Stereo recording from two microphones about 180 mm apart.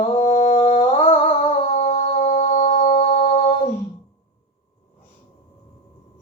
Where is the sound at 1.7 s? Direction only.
40° left (ahead or behind).